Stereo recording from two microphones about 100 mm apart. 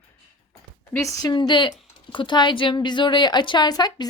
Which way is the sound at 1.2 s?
50° left (ahead or behind).